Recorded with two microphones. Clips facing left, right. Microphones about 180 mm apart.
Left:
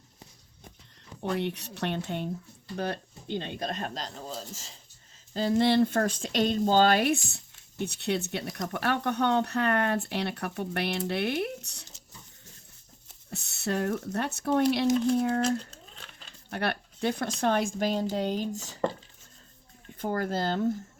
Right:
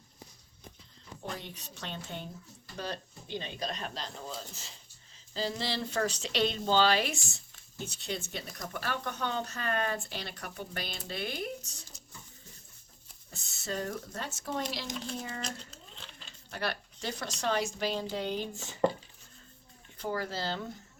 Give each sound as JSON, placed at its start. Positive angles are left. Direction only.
{"t": 1.2, "sound": "speech", "side_deg": 70}
{"t": 5.3, "sound": "speech", "side_deg": 55}
{"t": 13.3, "sound": "speech", "side_deg": 65}
{"t": 20.0, "sound": "speech", "side_deg": 50}